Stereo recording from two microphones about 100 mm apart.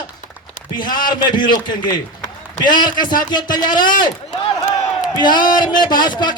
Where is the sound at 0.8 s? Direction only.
45° left (ahead or behind).